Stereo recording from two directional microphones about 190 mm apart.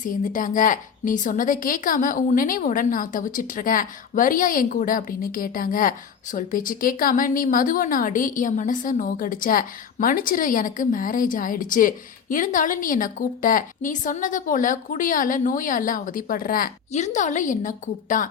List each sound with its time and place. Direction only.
0.0 s a woman's voice: 45° left (ahead or behind)